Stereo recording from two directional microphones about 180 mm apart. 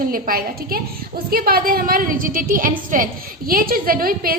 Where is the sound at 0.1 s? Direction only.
55° right (ahead or behind).